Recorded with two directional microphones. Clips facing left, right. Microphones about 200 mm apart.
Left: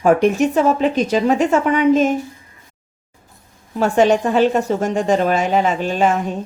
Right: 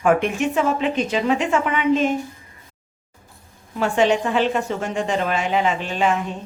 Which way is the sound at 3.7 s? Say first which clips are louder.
Left 4 dB; 40° left (ahead or behind).